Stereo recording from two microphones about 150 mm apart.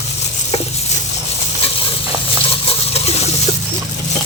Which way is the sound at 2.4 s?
40° left (ahead or behind).